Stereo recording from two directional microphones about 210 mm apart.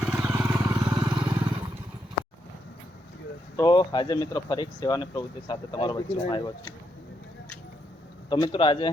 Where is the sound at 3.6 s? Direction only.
20° left (ahead or behind).